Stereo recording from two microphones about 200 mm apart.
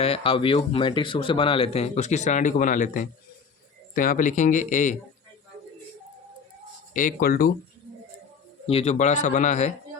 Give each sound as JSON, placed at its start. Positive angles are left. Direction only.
{"t": 0.0, "sound": "speech", "side_deg": 30}
{"t": 6.9, "sound": "speech", "side_deg": 45}
{"t": 8.6, "sound": "speech", "side_deg": 30}